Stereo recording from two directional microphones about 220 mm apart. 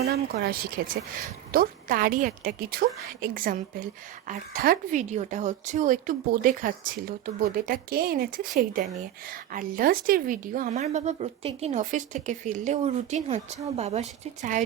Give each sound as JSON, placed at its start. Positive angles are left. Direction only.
{"t": 0.0, "sound": "speech", "side_deg": -45}